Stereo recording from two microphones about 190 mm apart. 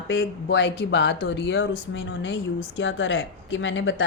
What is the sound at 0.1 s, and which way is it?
Speech, 65° left (ahead or behind).